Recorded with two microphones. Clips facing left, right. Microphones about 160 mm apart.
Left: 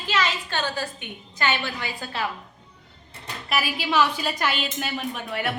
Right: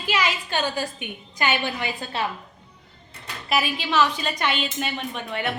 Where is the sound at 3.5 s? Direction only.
5° left (ahead or behind).